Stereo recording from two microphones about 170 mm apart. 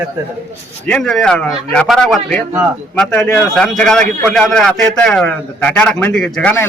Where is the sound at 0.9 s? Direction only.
5° left (ahead or behind).